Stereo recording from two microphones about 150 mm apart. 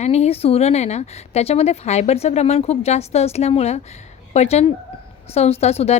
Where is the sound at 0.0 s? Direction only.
45° left (ahead or behind).